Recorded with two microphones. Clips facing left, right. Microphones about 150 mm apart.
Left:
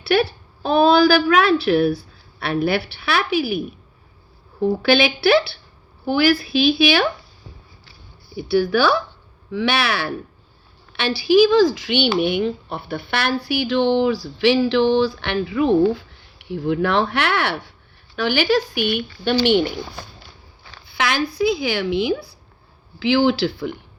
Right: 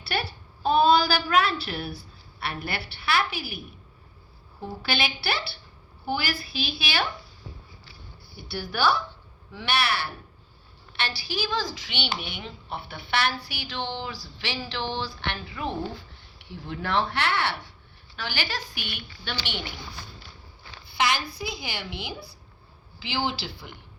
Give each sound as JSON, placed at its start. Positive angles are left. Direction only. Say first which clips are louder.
{"t": 0.0, "sound": "a woman's voice", "louder": "left 13 dB", "side_deg": 80}
{"t": 4.6, "sound": "a woman's voice", "louder": "left 13 dB", "side_deg": 90}
{"t": 6.1, "sound": "a woman's voice", "louder": "left 12 dB", "side_deg": 90}
{"t": 8.4, "sound": "speech", "louder": "left 11 dB", "side_deg": 90}
{"t": 20.8, "sound": "speech", "louder": "left 5 dB", "side_deg": 90}